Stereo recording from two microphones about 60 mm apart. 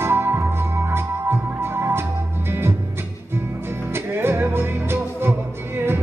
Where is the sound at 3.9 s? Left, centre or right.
Right.